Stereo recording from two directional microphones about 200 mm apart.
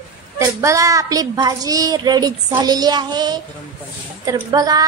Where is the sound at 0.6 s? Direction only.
15° right (ahead or behind).